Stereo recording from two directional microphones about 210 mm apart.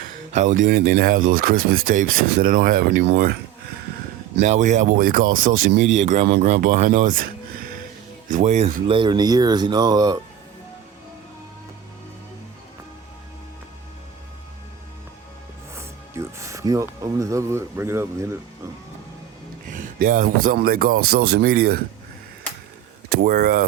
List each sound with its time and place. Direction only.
0.3 s speech: 35° right (ahead or behind)
4.4 s speech: 35° right (ahead or behind)
8.3 s speech: 35° right (ahead or behind); by 10.2 s 20° right (ahead or behind)
15.7 s speech: 10° right (ahead or behind)
19.7 s speech: 40° right (ahead or behind)
23.0 s speech: 45° right (ahead or behind)